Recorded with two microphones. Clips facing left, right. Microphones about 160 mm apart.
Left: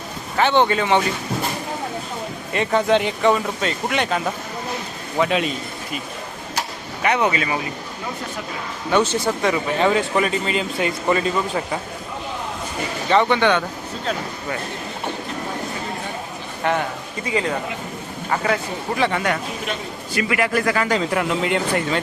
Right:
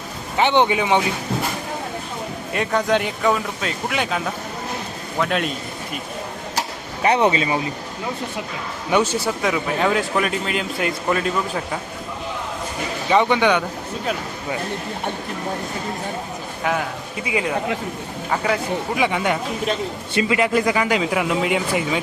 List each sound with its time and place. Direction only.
0.3 s speech: 20° right (ahead or behind)
2.5 s a man's voice: centre (ahead or behind)
7.0 s speech: 30° right (ahead or behind)
8.9 s speech: 10° right (ahead or behind)
13.1 s speech: 10° right (ahead or behind)
16.6 s speech: 5° right (ahead or behind)
18.9 s speech: 15° right (ahead or behind)